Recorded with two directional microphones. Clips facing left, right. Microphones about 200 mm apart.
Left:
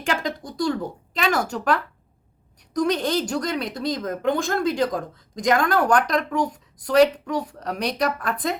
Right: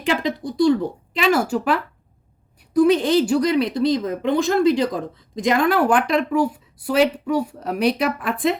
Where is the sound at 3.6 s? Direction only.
45° left (ahead or behind).